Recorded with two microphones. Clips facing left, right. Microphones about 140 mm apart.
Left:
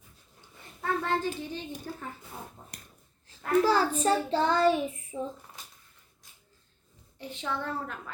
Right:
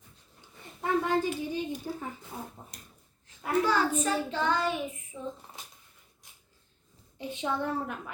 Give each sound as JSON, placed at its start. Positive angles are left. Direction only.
{"t": 0.8, "sound": "a child's voice", "side_deg": -15}
{"t": 3.6, "sound": "child singing", "side_deg": 35}
{"t": 7.2, "sound": "a woman's voice", "side_deg": -15}